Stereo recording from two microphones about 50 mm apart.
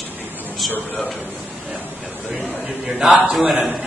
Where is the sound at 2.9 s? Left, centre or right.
Centre.